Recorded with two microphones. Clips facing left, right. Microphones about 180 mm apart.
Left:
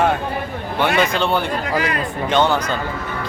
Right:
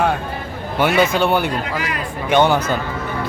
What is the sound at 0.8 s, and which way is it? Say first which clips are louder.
A man's voice: right 2 dB; 10° right (ahead or behind).